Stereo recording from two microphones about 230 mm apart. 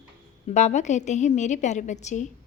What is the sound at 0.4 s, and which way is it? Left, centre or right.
A woman's voice, left.